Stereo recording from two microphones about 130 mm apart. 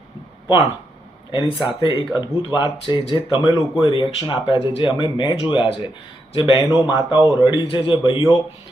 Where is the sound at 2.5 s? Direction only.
35° left (ahead or behind).